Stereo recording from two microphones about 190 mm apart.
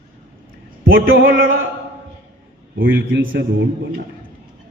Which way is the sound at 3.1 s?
75° right (ahead or behind).